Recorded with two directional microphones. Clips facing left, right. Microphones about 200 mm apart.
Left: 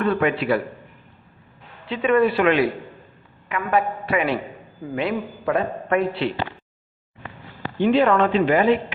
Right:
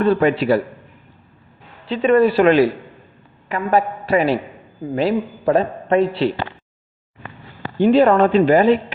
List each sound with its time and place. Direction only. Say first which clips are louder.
0.0 s a man's voice: right 5 dB; 30° right (ahead or behind)
1.9 s a man's voice: right 4 dB; 35° right (ahead or behind)
7.8 s a man's voice: right 5 dB; 40° right (ahead or behind)